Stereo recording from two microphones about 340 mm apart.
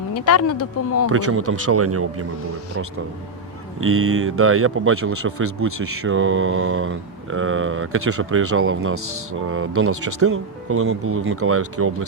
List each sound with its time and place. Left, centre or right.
0.1 s speech: left
1.0 s speech: right
3.8 s speech: right